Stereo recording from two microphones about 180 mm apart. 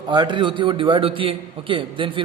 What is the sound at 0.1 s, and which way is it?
A man's voice, 25° right (ahead or behind).